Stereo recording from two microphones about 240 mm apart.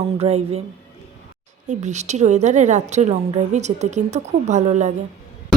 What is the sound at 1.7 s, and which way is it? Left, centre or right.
A woman's voice, right.